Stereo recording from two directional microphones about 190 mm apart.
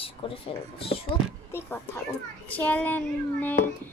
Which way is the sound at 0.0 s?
30° left (ahead or behind).